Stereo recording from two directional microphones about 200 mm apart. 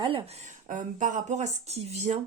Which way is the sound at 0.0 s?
25° right (ahead or behind).